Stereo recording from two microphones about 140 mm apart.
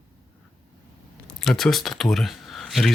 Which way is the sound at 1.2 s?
Centre (ahead or behind).